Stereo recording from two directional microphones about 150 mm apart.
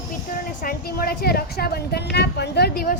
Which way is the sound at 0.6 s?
80° left.